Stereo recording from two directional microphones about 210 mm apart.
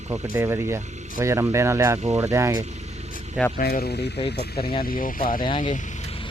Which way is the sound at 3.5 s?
45° left (ahead or behind).